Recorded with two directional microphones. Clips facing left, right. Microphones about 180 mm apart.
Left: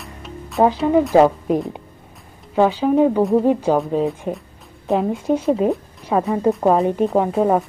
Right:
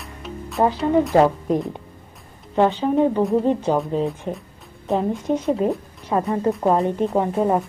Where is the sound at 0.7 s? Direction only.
Centre (ahead or behind).